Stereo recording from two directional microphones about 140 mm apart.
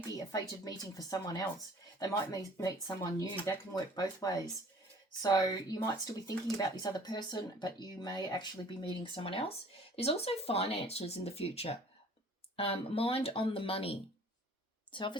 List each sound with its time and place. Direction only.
0.2 s a woman's voice: 25° left (ahead or behind)